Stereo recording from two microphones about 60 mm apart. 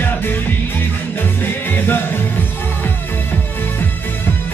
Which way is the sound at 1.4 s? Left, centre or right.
Left.